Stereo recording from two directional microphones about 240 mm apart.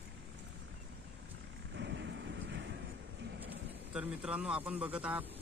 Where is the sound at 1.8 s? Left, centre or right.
Right.